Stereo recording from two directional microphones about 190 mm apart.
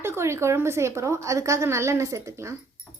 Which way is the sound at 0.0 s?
15° right (ahead or behind).